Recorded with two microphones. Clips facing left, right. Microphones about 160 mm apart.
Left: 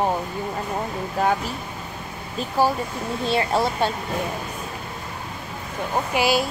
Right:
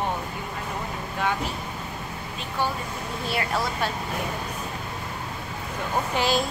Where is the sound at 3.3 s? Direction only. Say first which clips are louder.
Left 6 dB; 25° left (ahead or behind).